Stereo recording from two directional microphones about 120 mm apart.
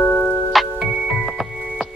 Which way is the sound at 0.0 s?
10° left (ahead or behind).